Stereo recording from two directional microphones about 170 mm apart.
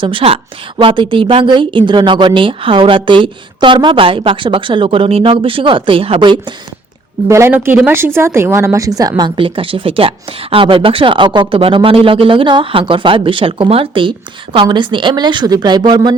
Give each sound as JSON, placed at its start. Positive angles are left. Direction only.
{"t": 0.0, "sound": "a woman's voice", "side_deg": -30}
{"t": 7.3, "sound": "a woman's voice", "side_deg": -15}